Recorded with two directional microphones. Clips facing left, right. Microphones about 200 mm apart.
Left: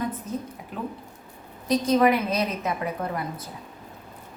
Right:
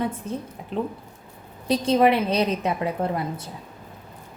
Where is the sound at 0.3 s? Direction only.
30° right (ahead or behind).